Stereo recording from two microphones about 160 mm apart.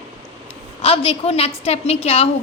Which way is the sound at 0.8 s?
35° left (ahead or behind).